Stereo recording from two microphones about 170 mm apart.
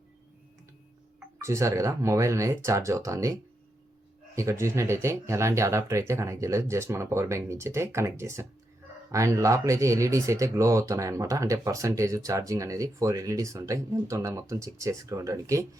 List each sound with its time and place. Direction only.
1.4 s speech: 20° right (ahead or behind)
4.4 s speech: 15° right (ahead or behind)